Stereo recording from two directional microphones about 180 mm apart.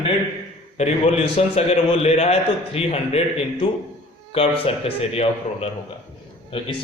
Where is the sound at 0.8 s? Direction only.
35° left (ahead or behind).